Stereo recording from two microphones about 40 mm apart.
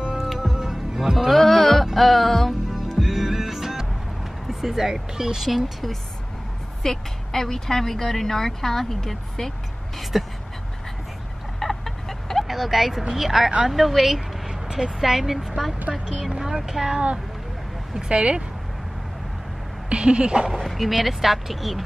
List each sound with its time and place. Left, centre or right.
0.1 s music: centre
1.3 s music: centre
3.0 s music: centre
4.5 s speech: centre
5.5 s speech: centre
6.8 s speech: centre
10.1 s speech: centre
11.6 s chicken: centre
12.4 s speech: centre
18.0 s speech: right
19.9 s speech: right
20.5 s speech: centre